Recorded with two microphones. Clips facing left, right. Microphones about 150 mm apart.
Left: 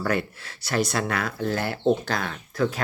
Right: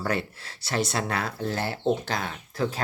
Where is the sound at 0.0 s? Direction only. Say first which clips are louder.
Left 3 dB; 30° right (ahead or behind).